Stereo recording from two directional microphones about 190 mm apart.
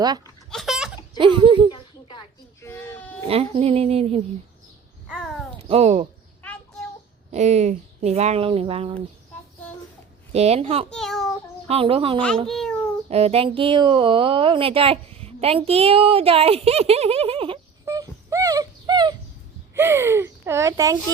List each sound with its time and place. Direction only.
0.5 s a sound: centre (ahead or behind)
1.2 s speech: 25° right (ahead or behind)
1.7 s baby cry: 20° left (ahead or behind)
3.2 s speech: 30° right (ahead or behind)
5.0 s babbling: centre (ahead or behind)
5.6 s speech: 35° right (ahead or behind)
7.3 s speech: 40° right (ahead or behind)
10.3 s speech: 35° right (ahead or behind)
10.8 s a child's voice: centre (ahead or behind)
11.7 s speech: 30° right (ahead or behind)
12.5 s a child's voice: 5° left (ahead or behind)
13.1 s speech: 35° right (ahead or behind)
17.8 s wail: 15° right (ahead or behind)
19.7 s speech: 15° right (ahead or behind)